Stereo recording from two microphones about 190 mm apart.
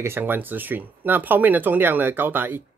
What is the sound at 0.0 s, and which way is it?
Speech, 10° right (ahead or behind).